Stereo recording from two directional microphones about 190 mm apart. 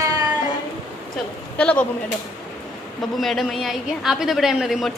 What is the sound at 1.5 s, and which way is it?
Speech, 5° left (ahead or behind).